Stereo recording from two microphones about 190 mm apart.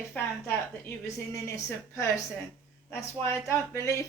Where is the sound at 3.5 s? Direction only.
15° left (ahead or behind).